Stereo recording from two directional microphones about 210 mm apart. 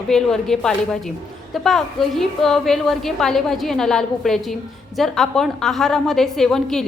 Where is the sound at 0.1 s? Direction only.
Centre (ahead or behind).